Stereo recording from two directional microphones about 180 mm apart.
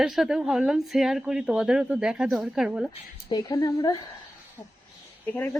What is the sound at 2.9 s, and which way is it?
Speech, 25° left (ahead or behind).